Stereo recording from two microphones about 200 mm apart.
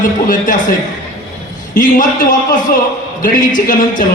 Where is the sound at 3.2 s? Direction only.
40° left (ahead or behind).